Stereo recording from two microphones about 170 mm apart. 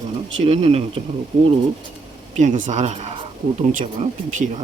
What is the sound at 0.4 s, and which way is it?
Speech, 35° right (ahead or behind).